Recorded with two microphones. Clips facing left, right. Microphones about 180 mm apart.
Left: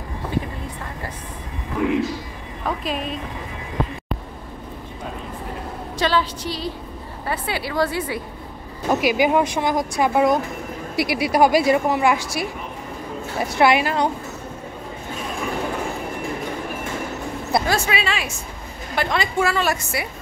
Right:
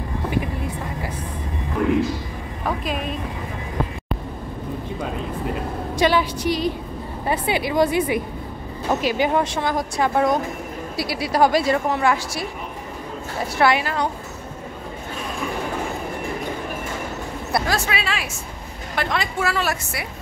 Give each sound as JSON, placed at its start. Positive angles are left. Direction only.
{"t": 1.8, "sound": "a woman's voice", "side_deg": 5}
{"t": 5.9, "sound": "a woman's voice", "side_deg": -15}
{"t": 9.0, "sound": "a woman's voice", "side_deg": 10}
{"t": 13.6, "sound": "a woman's voice", "side_deg": 15}
{"t": 17.6, "sound": "a woman's voice", "side_deg": 0}